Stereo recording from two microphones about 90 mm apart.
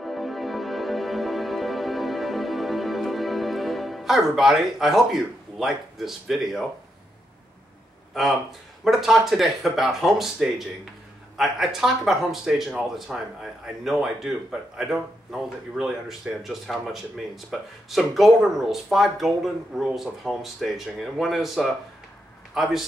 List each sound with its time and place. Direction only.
0.0 s music: centre (ahead or behind)
8.1 s a man's voice: centre (ahead or behind)